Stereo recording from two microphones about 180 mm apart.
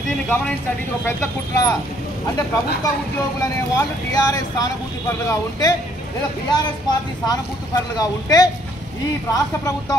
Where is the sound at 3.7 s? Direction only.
20° left (ahead or behind).